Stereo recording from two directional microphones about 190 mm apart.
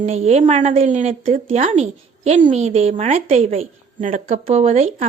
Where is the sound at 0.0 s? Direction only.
35° right (ahead or behind).